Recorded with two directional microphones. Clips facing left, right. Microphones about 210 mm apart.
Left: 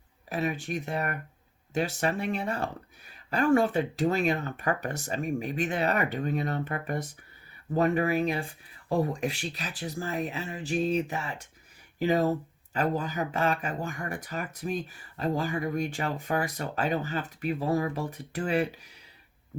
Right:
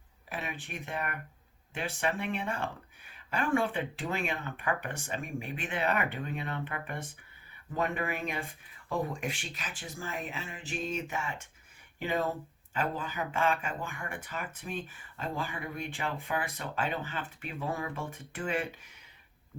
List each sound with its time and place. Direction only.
0.3 s speech: 40° left (ahead or behind)